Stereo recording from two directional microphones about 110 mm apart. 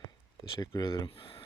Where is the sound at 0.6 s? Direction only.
35° left (ahead or behind).